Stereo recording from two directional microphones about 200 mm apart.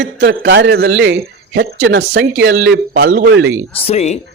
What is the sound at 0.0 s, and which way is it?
A man's voice, 60° right (ahead or behind).